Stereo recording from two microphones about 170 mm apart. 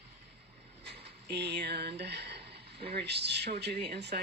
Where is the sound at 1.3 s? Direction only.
80° right.